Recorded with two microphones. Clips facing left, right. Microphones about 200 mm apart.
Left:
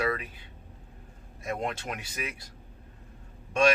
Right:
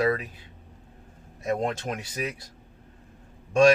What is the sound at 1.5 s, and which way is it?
Speech, 45° right (ahead or behind).